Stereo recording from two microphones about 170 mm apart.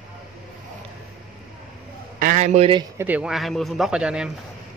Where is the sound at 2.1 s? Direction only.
50° right (ahead or behind).